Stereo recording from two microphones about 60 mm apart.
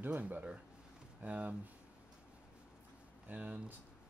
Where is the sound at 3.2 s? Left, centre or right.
Right.